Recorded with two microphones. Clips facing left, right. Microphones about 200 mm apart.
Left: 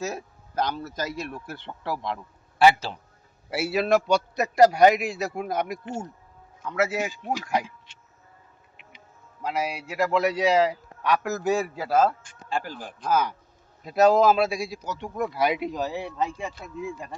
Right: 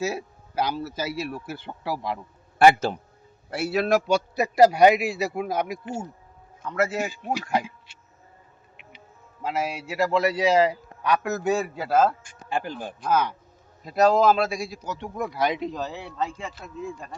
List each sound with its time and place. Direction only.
0.0 s speech: 10° right (ahead or behind)
2.6 s a man's voice: 50° right (ahead or behind)
3.5 s a man's voice: centre (ahead or behind)
7.1 s speech: 15° right (ahead or behind)
7.4 s speech: centre (ahead or behind)
9.4 s a man's voice: centre (ahead or behind)
12.2 s speech: 15° right (ahead or behind)
13.0 s a man's voice: centre (ahead or behind)